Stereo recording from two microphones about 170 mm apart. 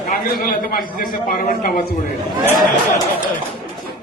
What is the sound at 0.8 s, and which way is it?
A man's voice, 55° left (ahead or behind).